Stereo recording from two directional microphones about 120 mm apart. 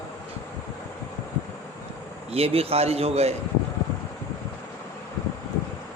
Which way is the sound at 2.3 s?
55° right (ahead or behind).